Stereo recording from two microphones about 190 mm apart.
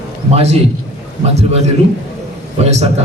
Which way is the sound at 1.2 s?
35° right (ahead or behind).